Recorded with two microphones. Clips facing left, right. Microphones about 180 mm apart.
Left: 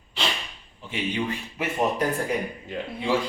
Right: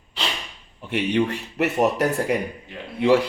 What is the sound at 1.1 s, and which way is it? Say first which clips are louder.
Speech: right 7 dB; 70° right (ahead or behind).